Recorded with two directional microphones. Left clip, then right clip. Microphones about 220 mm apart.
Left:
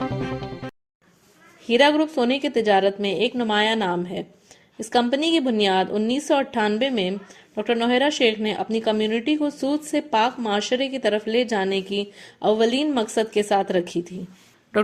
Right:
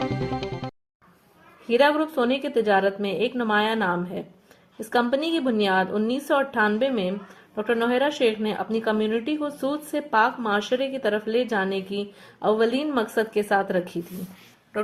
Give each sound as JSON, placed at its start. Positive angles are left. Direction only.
{"t": 0.0, "sound": "music", "side_deg": 0}
{"t": 1.6, "sound": "a woman's voice", "side_deg": 30}